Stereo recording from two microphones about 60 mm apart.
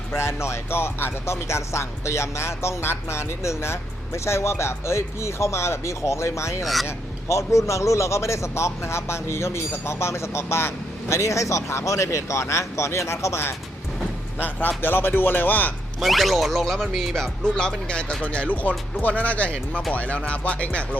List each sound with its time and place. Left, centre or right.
0.1 s a man's voice: left
14.4 s speech: left
16.0 s speech: centre
17.4 s speech: centre
18.9 s music: left